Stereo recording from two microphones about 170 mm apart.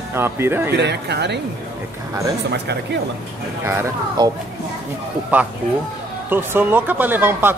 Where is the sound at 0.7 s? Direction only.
85° right.